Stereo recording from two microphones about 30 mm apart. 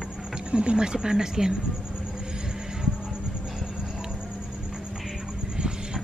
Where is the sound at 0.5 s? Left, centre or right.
Right.